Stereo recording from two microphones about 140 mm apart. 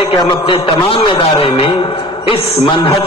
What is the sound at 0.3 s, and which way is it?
Speech, 35° left (ahead or behind).